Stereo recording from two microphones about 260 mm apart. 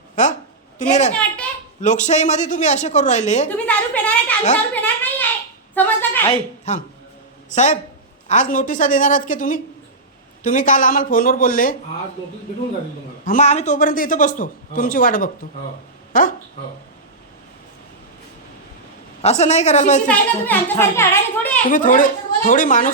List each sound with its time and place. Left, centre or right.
0.2 s a woman's voice: left
3.5 s a woman's voice: centre
6.2 s a woman's voice: left
13.2 s a man's voice: left
19.2 s a woman's voice: left
20.1 s a child's voice: centre
21.7 s a man's voice: left